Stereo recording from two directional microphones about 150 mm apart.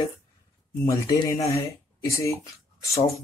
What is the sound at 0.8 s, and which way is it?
Speech, 25° left (ahead or behind).